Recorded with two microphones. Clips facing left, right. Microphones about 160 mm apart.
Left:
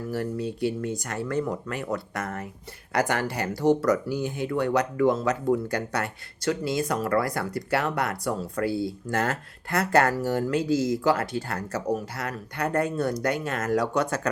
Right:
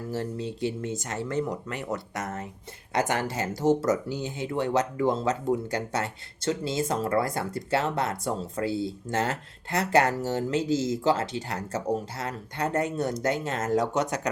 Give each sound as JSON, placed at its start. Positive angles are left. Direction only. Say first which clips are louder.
{"t": 0.1, "sound": "speech", "louder": "left 2 dB", "side_deg": -20}